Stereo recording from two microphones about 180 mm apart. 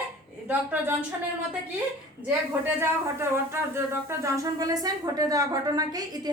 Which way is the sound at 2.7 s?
15° right (ahead or behind).